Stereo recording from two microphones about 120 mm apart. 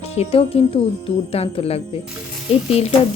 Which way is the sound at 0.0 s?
60° left (ahead or behind).